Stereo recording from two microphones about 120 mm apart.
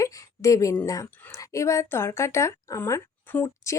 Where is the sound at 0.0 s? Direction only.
25° left (ahead or behind).